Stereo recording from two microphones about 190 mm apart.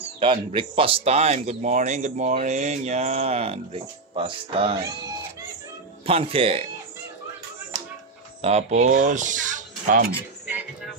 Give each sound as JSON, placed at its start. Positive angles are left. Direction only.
{"t": 0.2, "sound": "speech", "side_deg": -25}
{"t": 6.0, "sound": "speech", "side_deg": -30}
{"t": 8.4, "sound": "speech", "side_deg": -35}